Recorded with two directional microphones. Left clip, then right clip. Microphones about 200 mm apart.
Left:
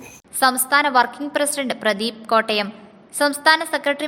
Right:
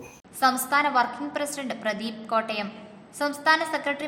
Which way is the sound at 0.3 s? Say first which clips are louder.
Left 5 dB; 40° left (ahead or behind).